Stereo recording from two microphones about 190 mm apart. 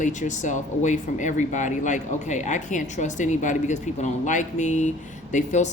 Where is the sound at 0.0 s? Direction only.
40° left (ahead or behind).